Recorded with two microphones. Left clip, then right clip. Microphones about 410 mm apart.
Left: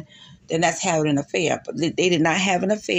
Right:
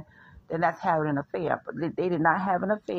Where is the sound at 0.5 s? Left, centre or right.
Right.